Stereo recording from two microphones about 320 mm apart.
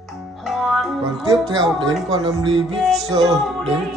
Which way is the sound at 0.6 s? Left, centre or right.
Centre.